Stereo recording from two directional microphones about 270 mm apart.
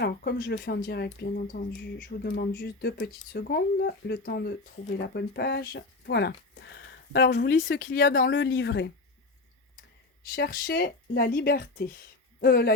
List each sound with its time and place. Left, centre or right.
0.0 s speech: left
10.3 s speech: left